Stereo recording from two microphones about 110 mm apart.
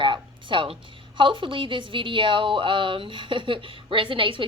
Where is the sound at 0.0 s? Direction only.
50° right (ahead or behind).